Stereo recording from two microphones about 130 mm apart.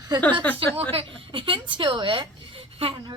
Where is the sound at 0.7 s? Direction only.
45° right (ahead or behind).